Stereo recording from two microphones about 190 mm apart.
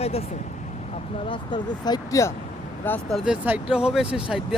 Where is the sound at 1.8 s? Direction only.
20° left (ahead or behind).